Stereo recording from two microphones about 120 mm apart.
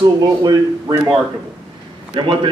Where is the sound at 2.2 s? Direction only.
45° right (ahead or behind).